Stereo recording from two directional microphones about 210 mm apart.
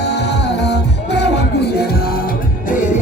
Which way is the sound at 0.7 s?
55° left (ahead or behind).